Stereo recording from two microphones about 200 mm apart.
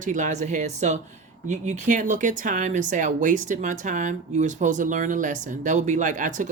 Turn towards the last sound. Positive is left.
turn(degrees=-40)  # may be behind; listen again after turning